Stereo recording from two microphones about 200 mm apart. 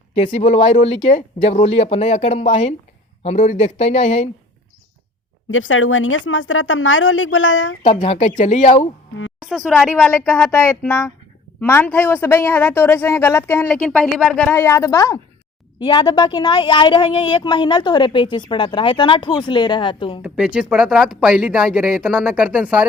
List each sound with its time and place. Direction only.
0.3 s speech: 30° left (ahead or behind)
5.5 s speech: 80° left
7.9 s speech: 30° left (ahead or behind)
9.4 s speech: centre (ahead or behind); by 20.2 s 25° left (ahead or behind)
20.2 s speech: 5° right (ahead or behind)